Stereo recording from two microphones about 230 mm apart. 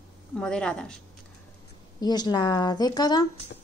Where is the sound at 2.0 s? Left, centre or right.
Centre.